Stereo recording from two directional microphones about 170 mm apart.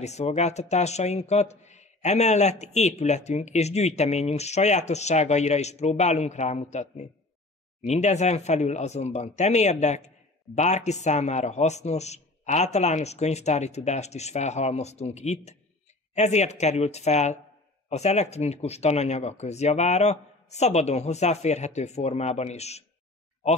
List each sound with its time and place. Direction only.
0.0 s speech: 40° left (ahead or behind)